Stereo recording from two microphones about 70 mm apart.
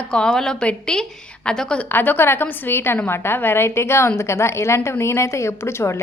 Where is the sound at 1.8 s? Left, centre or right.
Left.